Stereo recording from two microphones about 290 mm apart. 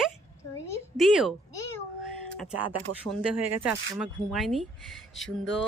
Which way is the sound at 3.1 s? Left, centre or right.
Centre.